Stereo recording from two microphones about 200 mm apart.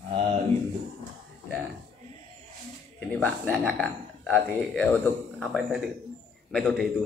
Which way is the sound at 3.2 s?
5° left (ahead or behind).